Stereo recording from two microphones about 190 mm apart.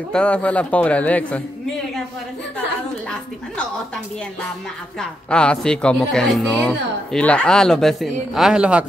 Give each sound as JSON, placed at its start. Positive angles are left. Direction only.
{"t": 0.1, "sound": "a man's voice", "side_deg": 5}
{"t": 5.3, "sound": "speech", "side_deg": 5}